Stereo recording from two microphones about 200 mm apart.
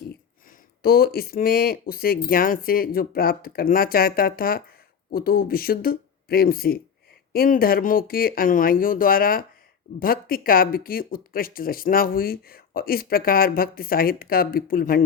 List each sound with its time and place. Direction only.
0.8 s speech: 50° left (ahead or behind)